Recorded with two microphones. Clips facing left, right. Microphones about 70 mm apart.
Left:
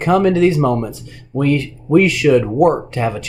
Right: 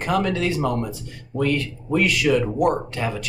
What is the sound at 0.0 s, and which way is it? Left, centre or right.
Speech, left.